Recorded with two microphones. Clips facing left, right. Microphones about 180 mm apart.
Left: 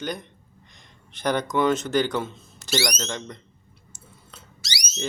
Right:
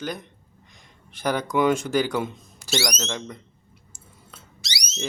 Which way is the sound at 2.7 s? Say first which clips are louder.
Even; 5° left (ahead or behind).